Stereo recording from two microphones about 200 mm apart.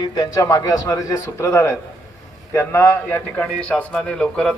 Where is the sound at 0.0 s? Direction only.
20° left (ahead or behind).